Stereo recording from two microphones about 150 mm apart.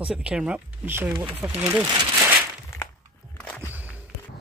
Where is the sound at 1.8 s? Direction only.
25° right (ahead or behind).